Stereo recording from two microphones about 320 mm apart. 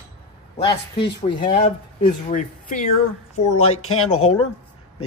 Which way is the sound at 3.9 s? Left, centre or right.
Left.